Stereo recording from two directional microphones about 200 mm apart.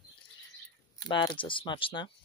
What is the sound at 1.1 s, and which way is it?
Speech, 25° left (ahead or behind).